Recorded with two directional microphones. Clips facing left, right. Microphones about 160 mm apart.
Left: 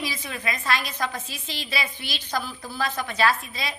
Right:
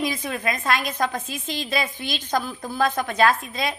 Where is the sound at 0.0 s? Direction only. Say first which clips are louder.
Right 6 dB; 50° right (ahead or behind).